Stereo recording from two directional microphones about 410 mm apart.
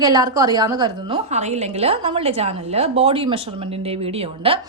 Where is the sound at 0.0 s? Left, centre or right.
Centre.